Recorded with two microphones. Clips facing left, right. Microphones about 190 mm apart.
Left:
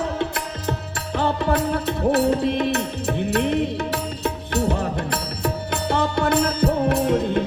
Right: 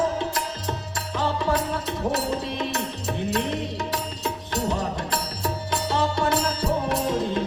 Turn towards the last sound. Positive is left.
turn(degrees=60)  # may be behind; listen again after turning